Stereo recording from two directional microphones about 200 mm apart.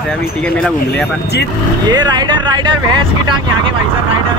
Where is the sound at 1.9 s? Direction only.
20° right (ahead or behind).